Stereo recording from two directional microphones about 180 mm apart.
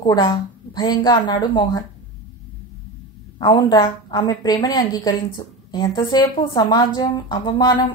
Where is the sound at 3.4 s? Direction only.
25° left (ahead or behind).